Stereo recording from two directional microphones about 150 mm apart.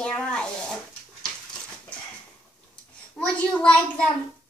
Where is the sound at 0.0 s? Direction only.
5° left (ahead or behind).